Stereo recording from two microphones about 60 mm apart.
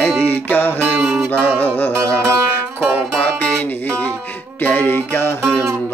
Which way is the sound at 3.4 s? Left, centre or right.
Centre.